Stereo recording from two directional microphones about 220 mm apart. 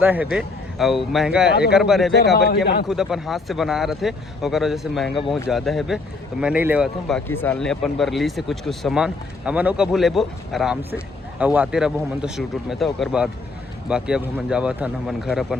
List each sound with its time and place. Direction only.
0.0 s speech: 5° right (ahead or behind)
1.5 s speech: 45° left (ahead or behind)
1.7 s speech: centre (ahead or behind)
7.3 s speech: 10° left (ahead or behind)